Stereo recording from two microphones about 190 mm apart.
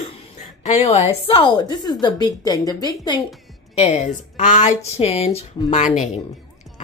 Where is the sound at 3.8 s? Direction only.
35° left (ahead or behind).